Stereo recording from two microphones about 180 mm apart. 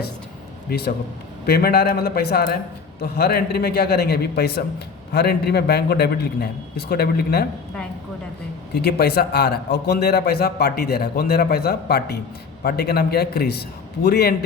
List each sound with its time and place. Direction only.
0.7 s a man's voice: 55° left (ahead or behind)
8.7 s a man's voice: 60° left (ahead or behind)